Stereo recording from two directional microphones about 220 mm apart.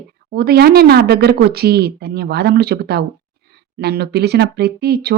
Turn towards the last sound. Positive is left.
turn(degrees=-45)  # may be behind; listen again after turning